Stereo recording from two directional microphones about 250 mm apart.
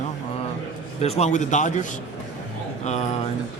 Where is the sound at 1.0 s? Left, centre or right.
Left.